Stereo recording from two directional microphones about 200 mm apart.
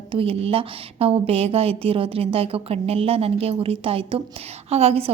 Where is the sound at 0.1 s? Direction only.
30° right (ahead or behind).